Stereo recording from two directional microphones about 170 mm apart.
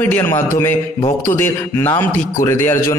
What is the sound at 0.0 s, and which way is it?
A man's voice, 10° left (ahead or behind).